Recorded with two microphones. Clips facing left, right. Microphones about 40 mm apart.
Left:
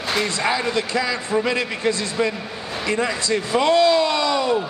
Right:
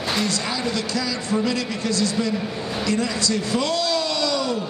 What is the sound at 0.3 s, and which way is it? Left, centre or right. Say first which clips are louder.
A man's voice: left 4 dB; left.